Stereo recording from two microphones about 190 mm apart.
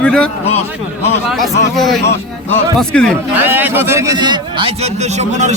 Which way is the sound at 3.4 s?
10° right (ahead or behind).